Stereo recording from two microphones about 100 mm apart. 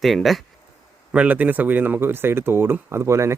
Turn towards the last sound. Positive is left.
turn(degrees=-30)  # may be behind; listen again after turning